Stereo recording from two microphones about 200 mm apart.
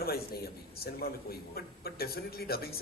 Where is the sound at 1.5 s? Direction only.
50° left (ahead or behind).